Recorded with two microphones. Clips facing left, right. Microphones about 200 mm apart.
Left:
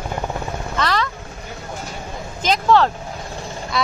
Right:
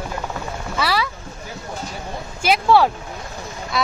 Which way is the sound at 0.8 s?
10° right (ahead or behind).